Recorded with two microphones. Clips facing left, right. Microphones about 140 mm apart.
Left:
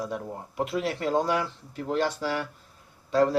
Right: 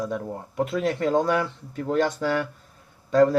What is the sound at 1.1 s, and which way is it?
Speech, 50° right (ahead or behind).